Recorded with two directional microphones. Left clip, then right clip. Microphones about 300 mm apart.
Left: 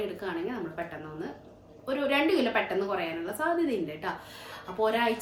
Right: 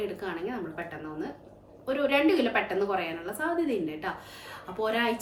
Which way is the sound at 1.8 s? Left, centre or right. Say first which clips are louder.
Right 2 dB; centre.